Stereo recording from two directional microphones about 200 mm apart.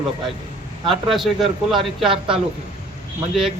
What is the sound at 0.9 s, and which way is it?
A man's voice, centre (ahead or behind).